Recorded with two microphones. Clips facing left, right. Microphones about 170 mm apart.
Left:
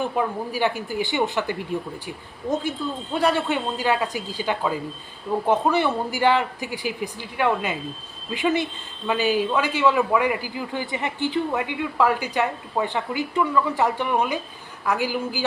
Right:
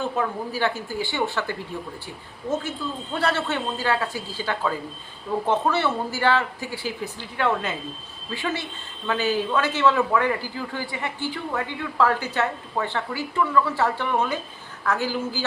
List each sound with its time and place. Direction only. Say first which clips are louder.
0.0 s a man's voice: left 2 dB; 15° left (ahead or behind)